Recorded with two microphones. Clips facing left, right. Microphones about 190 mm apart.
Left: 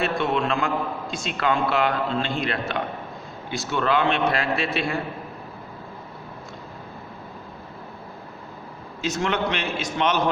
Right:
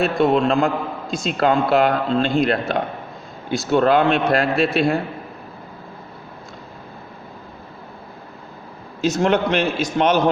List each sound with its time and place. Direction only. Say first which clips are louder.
0.0 s speech: right 7 dB; 40° right (ahead or behind)
9.0 s speech: right 7 dB; 40° right (ahead or behind)